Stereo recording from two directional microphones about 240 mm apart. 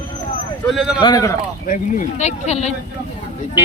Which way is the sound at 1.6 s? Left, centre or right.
Left.